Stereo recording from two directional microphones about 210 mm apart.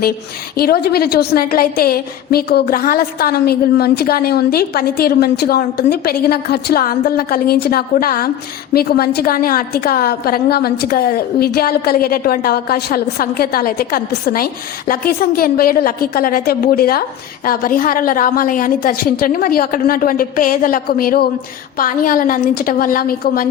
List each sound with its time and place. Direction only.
0.5 s a woman's voice: 45° left (ahead or behind)